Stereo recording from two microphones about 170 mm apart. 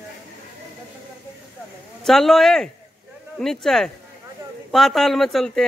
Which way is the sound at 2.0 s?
Centre (ahead or behind).